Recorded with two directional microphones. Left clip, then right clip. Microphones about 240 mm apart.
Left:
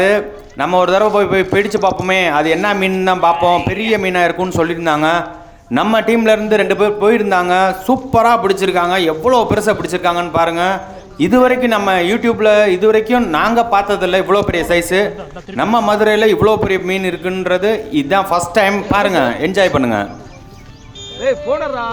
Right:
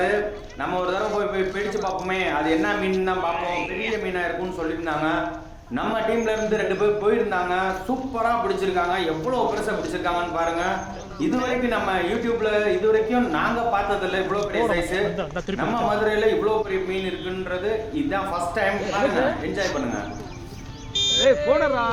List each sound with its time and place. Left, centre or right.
0.6 s a man's voice: left
15.5 s a man's voice: left
21.2 s speech: left